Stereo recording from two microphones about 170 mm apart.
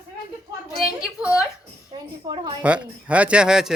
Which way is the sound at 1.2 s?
5° right (ahead or behind).